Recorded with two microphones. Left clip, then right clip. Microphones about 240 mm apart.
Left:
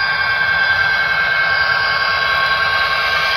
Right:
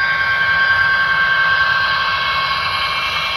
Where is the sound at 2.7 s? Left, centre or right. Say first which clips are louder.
Left 3 dB; left.